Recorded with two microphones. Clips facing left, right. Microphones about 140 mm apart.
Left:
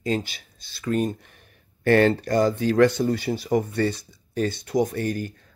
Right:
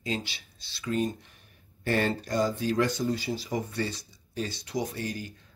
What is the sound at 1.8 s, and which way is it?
Speech, 70° left (ahead or behind).